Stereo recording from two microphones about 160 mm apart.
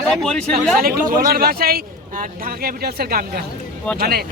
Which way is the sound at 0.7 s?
65° right (ahead or behind).